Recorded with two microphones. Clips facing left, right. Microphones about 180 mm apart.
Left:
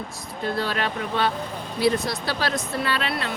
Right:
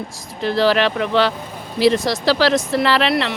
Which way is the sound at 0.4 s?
90° right.